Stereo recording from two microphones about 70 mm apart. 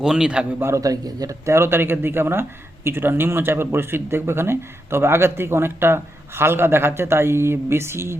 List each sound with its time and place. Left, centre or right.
0.0 s a man's voice: centre
0.8 s a man's voice: right
1.5 s speech: right